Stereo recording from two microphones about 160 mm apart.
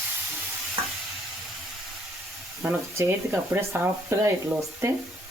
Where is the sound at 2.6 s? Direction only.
15° right (ahead or behind).